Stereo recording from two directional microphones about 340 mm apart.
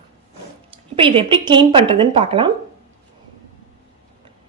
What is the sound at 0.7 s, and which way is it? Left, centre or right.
Speech, centre.